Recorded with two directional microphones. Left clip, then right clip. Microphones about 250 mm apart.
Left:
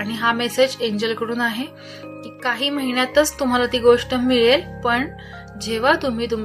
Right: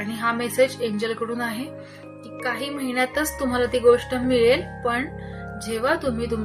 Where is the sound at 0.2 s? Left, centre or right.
Left.